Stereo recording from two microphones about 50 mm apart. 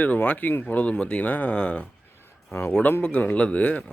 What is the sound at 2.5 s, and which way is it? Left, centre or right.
Speech, left.